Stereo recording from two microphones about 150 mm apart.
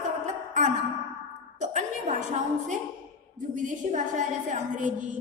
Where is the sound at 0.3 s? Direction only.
55° right (ahead or behind).